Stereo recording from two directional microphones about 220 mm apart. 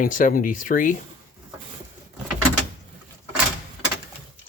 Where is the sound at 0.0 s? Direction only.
40° left (ahead or behind).